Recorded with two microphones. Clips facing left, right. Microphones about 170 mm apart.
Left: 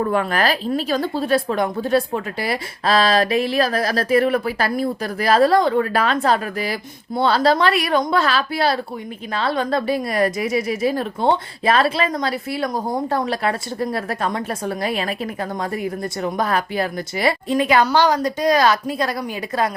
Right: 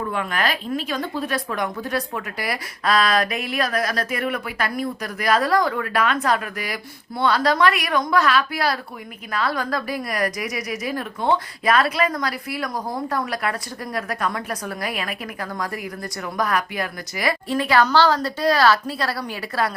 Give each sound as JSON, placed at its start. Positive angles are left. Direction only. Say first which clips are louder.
{"t": 0.0, "sound": "a woman's voice", "louder": "left 5 dB", "side_deg": 40}